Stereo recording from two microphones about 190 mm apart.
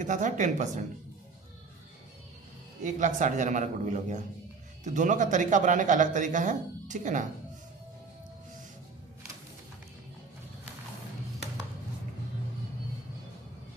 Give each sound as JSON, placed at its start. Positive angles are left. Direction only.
{"t": 0.0, "sound": "speech", "side_deg": -40}
{"t": 2.8, "sound": "speech", "side_deg": -40}